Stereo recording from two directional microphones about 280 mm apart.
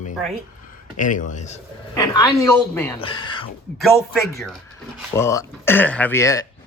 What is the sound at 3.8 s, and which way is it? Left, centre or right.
Speech, centre.